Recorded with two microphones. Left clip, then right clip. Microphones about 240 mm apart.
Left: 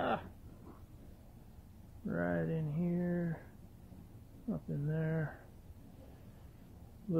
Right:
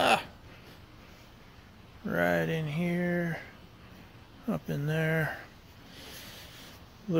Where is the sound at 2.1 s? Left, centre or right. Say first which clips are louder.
Right 9 dB; right.